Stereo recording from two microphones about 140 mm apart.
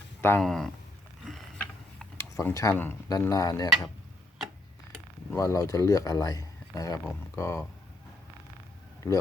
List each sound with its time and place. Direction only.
0.2 s speech: 15° left (ahead or behind)
0.4 s speech: 5° left (ahead or behind)
1.3 s a sound: 5° left (ahead or behind)
2.1 s speech: 20° left (ahead or behind)
5.3 s speech: 20° left (ahead or behind)